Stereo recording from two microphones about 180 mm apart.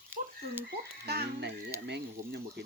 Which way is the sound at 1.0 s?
65° right (ahead or behind).